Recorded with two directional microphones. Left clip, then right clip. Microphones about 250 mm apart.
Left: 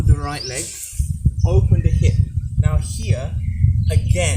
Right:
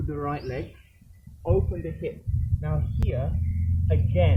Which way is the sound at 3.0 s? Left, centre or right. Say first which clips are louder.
Left 2 dB; centre.